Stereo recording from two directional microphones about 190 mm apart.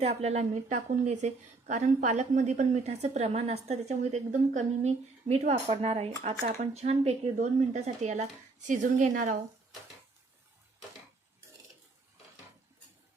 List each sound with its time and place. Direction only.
0.0 s a woman's voice: 35° right (ahead or behind)